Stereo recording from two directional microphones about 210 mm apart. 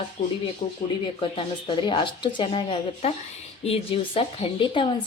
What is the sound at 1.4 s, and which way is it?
A woman's voice, 25° left (ahead or behind).